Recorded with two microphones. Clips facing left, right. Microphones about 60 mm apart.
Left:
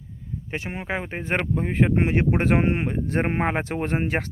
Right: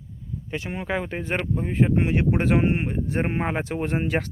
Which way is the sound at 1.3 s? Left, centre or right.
Left.